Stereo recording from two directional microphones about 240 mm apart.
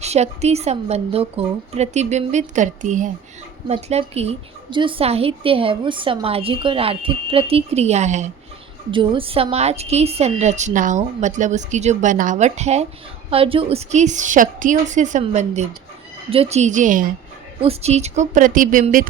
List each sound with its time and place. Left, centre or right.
0.0 s a woman's voice: right